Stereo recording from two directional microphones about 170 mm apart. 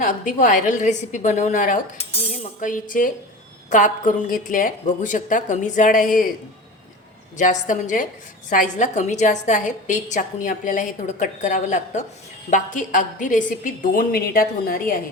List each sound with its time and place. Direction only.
0.0 s a woman's voice: 50° left (ahead or behind)
7.3 s a woman's voice: 45° left (ahead or behind)